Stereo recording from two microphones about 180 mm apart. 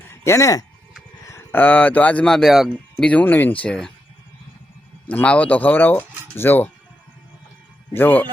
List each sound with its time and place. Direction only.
0.1 s speech: 15° left (ahead or behind)
5.0 s speech: 5° left (ahead or behind)
7.9 s speech: 10° left (ahead or behind)